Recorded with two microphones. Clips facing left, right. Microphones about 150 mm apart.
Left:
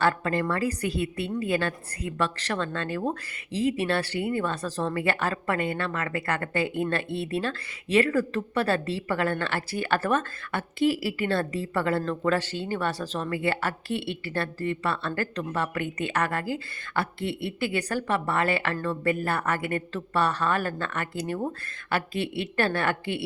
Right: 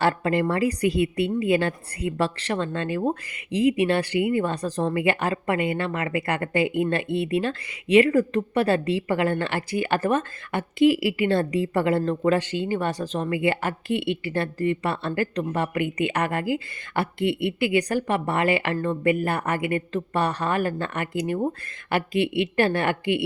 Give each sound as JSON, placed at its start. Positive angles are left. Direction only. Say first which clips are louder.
{"t": 0.0, "sound": "a woman's voice", "louder": "right 3 dB", "side_deg": -25}
{"t": 2.5, "sound": "a woman's voice", "louder": "right 3 dB", "side_deg": -10}
{"t": 9.7, "sound": "speech", "louder": "right 3 dB", "side_deg": -10}
{"t": 11.8, "sound": "a woman's voice", "louder": "right 3 dB", "side_deg": -20}